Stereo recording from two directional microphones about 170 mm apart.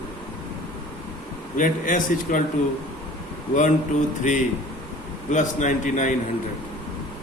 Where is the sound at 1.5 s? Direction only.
50° left (ahead or behind).